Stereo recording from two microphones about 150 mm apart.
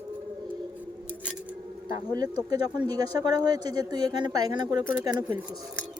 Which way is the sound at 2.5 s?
25° right (ahead or behind).